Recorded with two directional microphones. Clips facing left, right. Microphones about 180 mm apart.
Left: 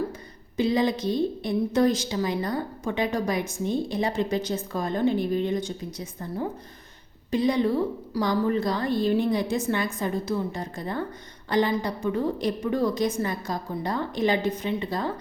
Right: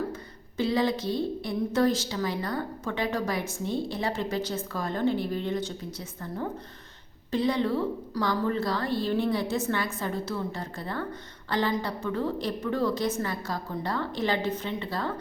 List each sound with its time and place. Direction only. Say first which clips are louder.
0.1 s a woman's voice: right 2 dB; 15° left (ahead or behind)